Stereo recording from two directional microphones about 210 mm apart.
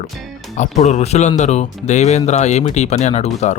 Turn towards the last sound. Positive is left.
turn(degrees=30)  # may be behind; listen again after turning